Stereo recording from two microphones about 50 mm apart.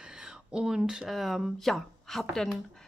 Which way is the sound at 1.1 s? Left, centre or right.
Centre.